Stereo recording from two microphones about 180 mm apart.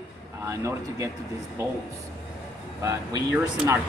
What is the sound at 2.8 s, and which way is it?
Speech, 15° right (ahead or behind).